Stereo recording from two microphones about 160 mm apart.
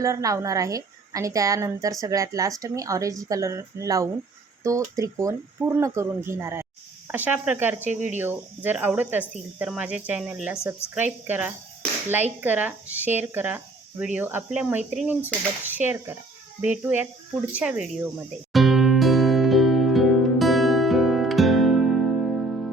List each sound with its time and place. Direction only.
0.0 s a woman's voice: 20° right (ahead or behind)
18.5 s music: centre (ahead or behind)